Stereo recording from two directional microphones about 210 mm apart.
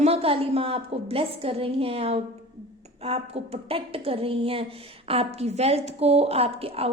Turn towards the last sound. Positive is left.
turn(degrees=-30)  # may be behind; listen again after turning